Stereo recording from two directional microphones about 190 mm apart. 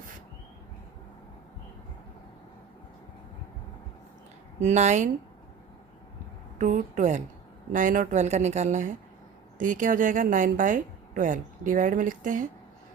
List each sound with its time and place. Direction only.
4.6 s a woman's voice: 35° right (ahead or behind)
6.6 s a woman's voice: 40° right (ahead or behind)